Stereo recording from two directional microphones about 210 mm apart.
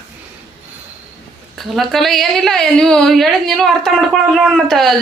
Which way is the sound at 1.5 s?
Centre (ahead or behind).